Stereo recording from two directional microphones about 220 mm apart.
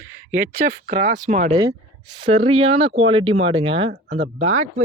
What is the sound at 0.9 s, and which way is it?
Speech, 35° right (ahead or behind).